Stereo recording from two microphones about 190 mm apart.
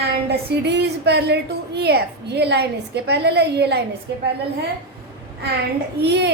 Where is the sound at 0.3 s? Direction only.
65° right (ahead or behind).